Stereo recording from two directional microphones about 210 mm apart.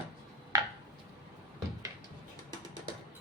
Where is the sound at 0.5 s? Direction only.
15° right (ahead or behind).